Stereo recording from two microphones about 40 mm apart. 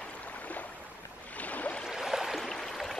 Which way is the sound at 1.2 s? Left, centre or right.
Left.